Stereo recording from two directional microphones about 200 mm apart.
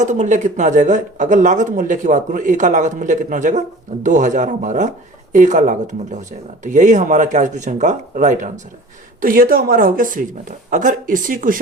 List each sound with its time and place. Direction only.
0.0 s speech: 35° right (ahead or behind)